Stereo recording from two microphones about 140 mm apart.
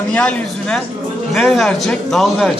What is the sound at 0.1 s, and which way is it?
A man's voice, 5° left (ahead or behind).